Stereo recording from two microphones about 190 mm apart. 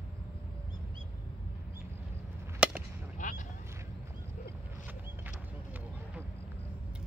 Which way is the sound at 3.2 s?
40° left (ahead or behind).